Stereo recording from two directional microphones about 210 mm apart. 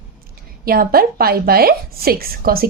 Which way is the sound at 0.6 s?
45° right (ahead or behind).